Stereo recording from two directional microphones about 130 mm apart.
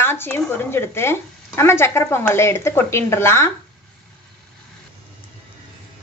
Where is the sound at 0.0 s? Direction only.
15° left (ahead or behind).